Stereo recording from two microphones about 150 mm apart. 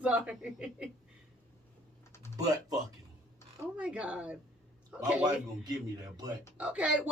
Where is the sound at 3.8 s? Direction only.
5° right (ahead or behind).